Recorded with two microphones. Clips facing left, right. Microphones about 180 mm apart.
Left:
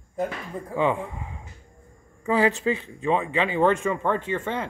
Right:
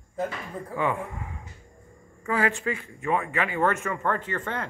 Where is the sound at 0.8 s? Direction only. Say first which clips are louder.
Left 4 dB; 20° left (ahead or behind).